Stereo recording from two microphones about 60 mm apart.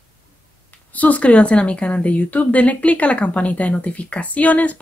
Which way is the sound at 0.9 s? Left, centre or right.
Left.